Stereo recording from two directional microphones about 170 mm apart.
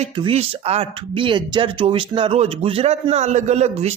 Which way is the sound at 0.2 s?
35° right (ahead or behind).